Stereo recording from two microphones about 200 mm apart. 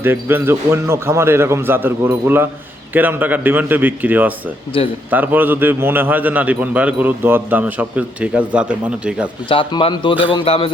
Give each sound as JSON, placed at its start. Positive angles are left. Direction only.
{"t": 0.0, "sound": "a man's voice", "side_deg": -10}
{"t": 4.7, "sound": "speech", "side_deg": 25}
{"t": 5.1, "sound": "a man's voice", "side_deg": -10}
{"t": 9.5, "sound": "speech", "side_deg": 25}